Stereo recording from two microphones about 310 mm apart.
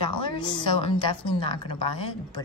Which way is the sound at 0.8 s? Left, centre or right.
Centre.